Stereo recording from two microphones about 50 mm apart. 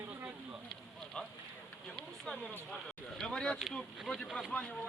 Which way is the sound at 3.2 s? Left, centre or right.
Centre.